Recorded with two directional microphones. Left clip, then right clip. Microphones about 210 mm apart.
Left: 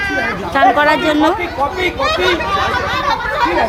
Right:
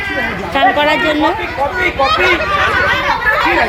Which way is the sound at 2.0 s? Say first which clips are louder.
Right 3 dB; 40° left (ahead or behind).